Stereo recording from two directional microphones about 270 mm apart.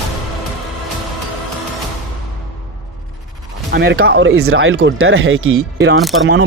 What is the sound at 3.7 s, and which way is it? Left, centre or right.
Speech, right.